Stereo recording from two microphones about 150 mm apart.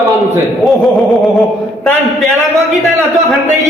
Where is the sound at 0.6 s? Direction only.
Centre (ahead or behind).